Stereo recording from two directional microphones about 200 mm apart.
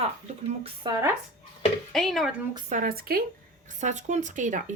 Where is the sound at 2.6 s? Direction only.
45° right (ahead or behind).